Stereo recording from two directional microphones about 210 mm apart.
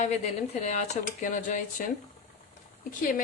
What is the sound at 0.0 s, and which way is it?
Speech, 35° left (ahead or behind).